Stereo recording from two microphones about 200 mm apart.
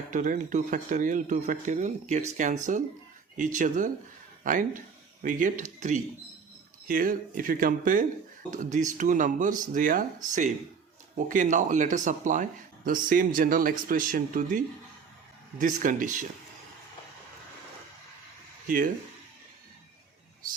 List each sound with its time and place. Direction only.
0.1 s speech: 40° right (ahead or behind)